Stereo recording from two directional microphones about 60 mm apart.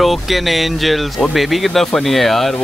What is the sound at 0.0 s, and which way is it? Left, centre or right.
Speech, centre.